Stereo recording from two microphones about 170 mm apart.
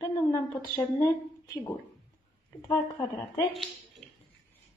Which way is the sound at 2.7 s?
20° left (ahead or behind).